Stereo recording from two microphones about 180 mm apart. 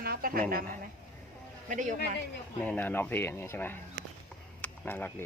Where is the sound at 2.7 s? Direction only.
10° left (ahead or behind).